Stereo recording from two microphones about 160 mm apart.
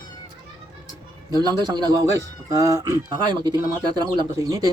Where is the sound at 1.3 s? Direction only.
25° right (ahead or behind).